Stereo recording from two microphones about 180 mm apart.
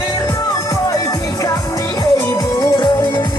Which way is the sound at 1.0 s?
20° left (ahead or behind).